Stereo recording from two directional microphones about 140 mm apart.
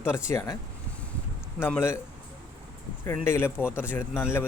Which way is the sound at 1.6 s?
15° left (ahead or behind).